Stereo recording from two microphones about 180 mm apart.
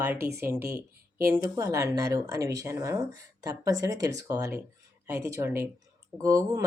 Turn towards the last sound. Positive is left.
turn(degrees=-20)  # may be behind; listen again after turning